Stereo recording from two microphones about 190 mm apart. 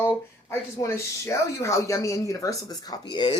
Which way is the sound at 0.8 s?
15° left (ahead or behind).